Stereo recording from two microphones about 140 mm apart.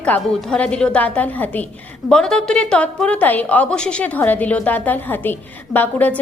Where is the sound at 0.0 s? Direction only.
10° left (ahead or behind).